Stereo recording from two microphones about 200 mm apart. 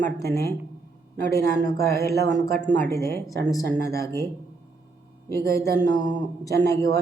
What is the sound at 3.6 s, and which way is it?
Speech, 55° right (ahead or behind).